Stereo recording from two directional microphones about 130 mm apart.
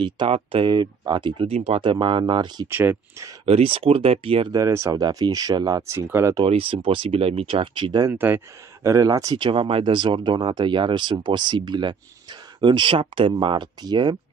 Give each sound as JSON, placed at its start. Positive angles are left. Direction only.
{"t": 0.0, "sound": "speech", "side_deg": -40}
{"t": 1.5, "sound": "speech", "side_deg": -55}
{"t": 1.8, "sound": "speech", "side_deg": -40}
{"t": 2.7, "sound": "speech", "side_deg": -15}
{"t": 3.4, "sound": "speech", "side_deg": -45}
{"t": 4.5, "sound": "speech", "side_deg": -25}
{"t": 5.9, "sound": "speech", "side_deg": -15}
{"t": 6.3, "sound": "speech", "side_deg": -40}
{"t": 8.1, "sound": "speech", "side_deg": -15}
{"t": 8.8, "sound": "speech", "side_deg": -25}